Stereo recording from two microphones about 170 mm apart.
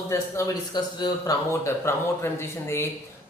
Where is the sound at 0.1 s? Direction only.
20° left (ahead or behind).